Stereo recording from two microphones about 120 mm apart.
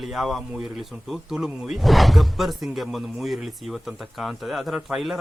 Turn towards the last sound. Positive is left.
turn(degrees=-5)  # may be behind; listen again after turning